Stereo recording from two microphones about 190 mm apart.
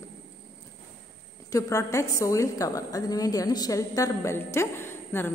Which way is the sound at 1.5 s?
15° left (ahead or behind).